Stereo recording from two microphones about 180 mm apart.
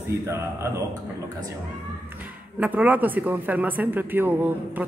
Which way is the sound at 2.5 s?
10° right (ahead or behind).